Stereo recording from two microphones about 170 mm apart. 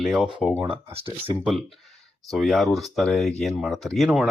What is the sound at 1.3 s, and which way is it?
Speech, 5° right (ahead or behind).